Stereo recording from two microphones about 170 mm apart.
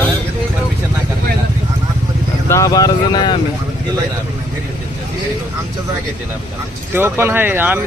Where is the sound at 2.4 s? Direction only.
20° left (ahead or behind).